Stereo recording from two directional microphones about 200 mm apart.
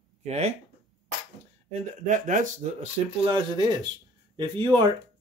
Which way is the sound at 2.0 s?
40° right (ahead or behind).